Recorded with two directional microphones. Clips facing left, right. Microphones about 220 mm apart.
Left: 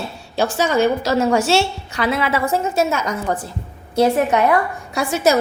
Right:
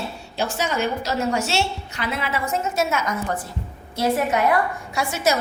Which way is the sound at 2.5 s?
30° left (ahead or behind).